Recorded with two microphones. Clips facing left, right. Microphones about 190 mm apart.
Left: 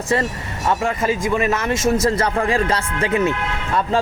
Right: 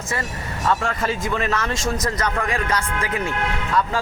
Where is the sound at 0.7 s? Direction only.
15° left (ahead or behind).